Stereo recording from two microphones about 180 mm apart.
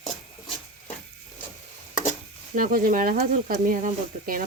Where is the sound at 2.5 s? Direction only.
50° right (ahead or behind).